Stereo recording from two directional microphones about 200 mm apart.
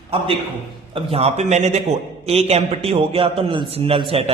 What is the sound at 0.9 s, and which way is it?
A man's voice, 30° right (ahead or behind).